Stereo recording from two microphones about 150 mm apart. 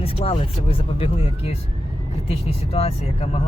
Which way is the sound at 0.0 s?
40° left (ahead or behind).